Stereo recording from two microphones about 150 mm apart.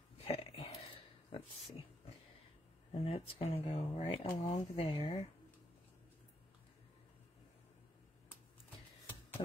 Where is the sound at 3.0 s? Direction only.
40° left (ahead or behind).